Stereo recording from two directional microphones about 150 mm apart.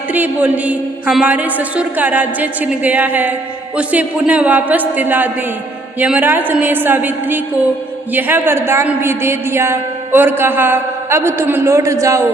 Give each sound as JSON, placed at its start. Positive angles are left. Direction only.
{"t": 0.1, "sound": "a woman's voice", "side_deg": -10}